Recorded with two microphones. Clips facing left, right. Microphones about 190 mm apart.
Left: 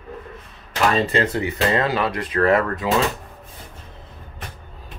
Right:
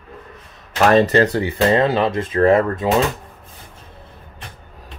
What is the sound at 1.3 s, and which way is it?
Speech, 30° right (ahead or behind).